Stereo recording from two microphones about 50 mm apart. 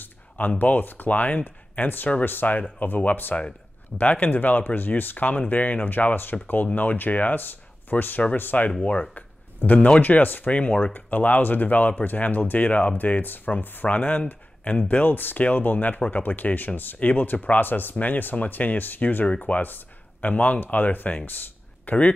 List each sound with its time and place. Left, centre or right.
0.6 s speech: left
9.1 s a sound: left
10.0 s speech: left
21.8 s speech: left